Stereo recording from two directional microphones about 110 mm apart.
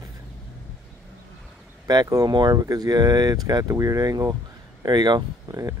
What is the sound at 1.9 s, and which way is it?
Speech, 35° right (ahead or behind).